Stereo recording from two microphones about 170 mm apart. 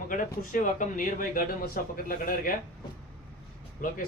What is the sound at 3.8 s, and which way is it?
Speech, 50° left (ahead or behind).